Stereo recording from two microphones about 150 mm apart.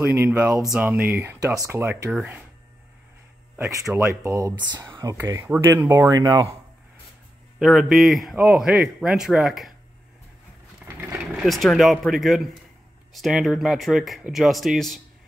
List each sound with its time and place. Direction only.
0.2 s speech: 10° right (ahead or behind)
3.9 s speech: 20° right (ahead or behind)
5.1 s speech: 15° right (ahead or behind)
7.5 s a man's voice: centre (ahead or behind)
11.0 s a man's voice: 10° right (ahead or behind)